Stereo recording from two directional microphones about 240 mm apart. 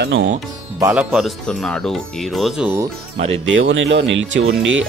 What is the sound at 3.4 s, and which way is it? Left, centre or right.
Speech, right.